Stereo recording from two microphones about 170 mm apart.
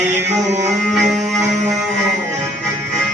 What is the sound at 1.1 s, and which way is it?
Music, centre (ahead or behind).